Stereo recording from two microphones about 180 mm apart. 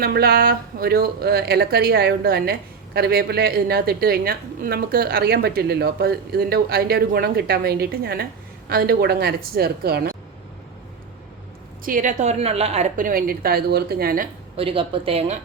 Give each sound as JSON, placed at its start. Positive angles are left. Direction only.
{"t": 0.0, "sound": "speech", "side_deg": -60}
{"t": 11.9, "sound": "a woman's voice", "side_deg": -45}
{"t": 14.5, "sound": "speech", "side_deg": -30}